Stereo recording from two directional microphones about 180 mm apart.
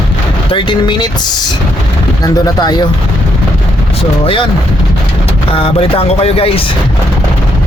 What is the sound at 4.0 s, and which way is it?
Speech, 30° left (ahead or behind).